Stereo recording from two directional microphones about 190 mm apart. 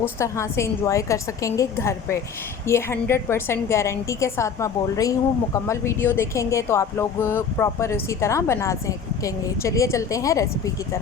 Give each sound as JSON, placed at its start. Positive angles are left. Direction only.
{"t": 0.0, "sound": "speech", "side_deg": 15}